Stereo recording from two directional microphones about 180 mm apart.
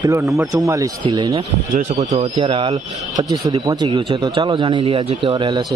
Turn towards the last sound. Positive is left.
turn(degrees=-25)  # may be behind; listen again after turning